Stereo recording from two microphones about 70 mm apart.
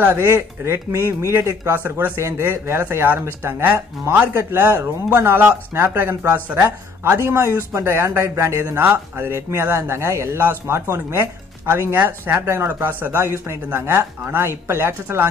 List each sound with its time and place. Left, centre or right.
0.0 s speech: right
1.7 s speech: right